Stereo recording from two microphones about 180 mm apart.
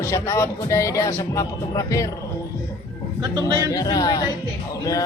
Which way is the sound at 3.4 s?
20° left (ahead or behind).